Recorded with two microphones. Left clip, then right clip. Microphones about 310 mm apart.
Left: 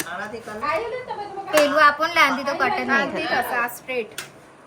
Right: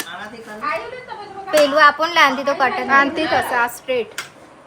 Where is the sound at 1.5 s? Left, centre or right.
Centre.